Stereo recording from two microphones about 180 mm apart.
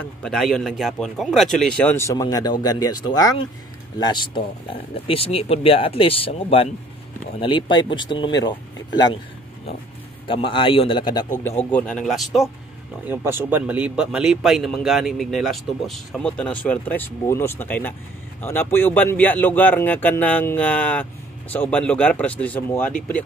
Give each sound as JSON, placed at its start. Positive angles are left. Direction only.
{"t": 0.0, "sound": "a man's voice", "side_deg": 5}
{"t": 10.2, "sound": "speech", "side_deg": 30}
{"t": 11.7, "sound": "a man's voice", "side_deg": 5}
{"t": 13.0, "sound": "a man's voice", "side_deg": -10}